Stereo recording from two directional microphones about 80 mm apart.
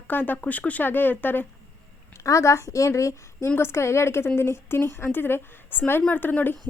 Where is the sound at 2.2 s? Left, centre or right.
Left.